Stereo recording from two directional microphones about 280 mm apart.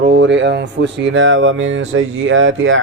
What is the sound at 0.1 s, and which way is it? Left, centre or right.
Speech, right.